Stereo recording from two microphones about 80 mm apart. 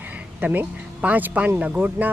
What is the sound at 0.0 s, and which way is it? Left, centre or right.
Speech, right.